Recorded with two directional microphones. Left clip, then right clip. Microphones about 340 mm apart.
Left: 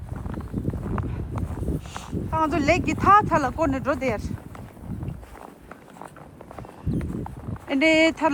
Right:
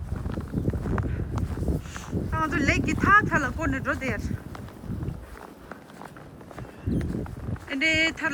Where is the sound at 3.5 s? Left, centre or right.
Centre.